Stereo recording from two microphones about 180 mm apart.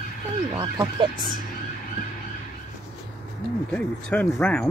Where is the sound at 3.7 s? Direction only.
10° left (ahead or behind).